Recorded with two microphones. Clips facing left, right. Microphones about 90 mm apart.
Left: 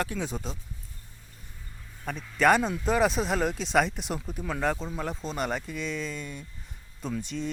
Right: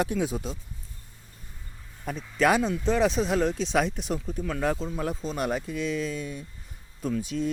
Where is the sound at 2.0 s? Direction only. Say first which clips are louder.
Left 1 dB; 5° right (ahead or behind).